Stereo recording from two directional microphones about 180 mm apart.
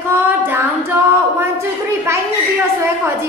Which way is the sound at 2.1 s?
15° right (ahead or behind).